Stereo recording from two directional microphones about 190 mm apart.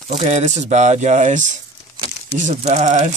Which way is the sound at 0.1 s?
35° right (ahead or behind).